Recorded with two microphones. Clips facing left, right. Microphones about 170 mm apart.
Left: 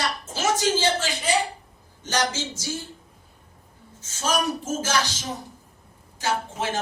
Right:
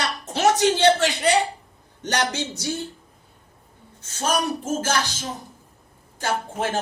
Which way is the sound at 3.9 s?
55° right (ahead or behind).